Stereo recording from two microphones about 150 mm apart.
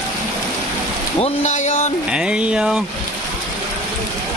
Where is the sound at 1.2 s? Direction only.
50° left (ahead or behind).